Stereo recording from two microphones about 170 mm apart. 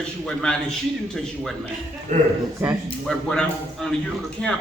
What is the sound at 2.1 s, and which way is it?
Speech, 45° right (ahead or behind).